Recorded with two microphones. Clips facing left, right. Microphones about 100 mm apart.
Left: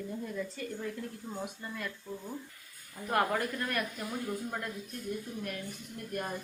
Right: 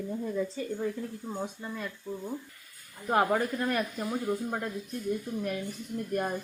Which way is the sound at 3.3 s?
25° right (ahead or behind).